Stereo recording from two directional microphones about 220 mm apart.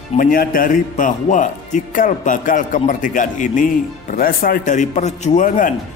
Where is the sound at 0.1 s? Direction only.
40° left (ahead or behind).